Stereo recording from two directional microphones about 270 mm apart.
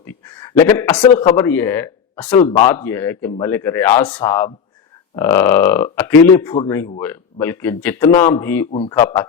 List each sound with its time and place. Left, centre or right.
0.0 s a sound: centre
1.2 s speech: centre
2.3 s speech: centre